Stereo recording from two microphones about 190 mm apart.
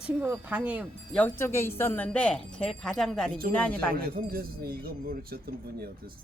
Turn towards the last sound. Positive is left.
turn(degrees=-55)  # may be behind; listen again after turning